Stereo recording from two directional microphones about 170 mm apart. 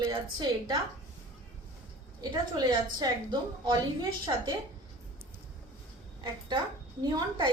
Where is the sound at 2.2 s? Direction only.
25° right (ahead or behind).